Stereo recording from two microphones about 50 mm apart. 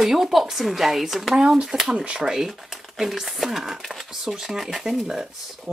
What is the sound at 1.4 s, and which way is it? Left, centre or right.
Speech, centre.